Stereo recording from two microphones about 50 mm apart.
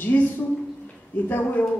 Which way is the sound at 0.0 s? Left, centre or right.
Left.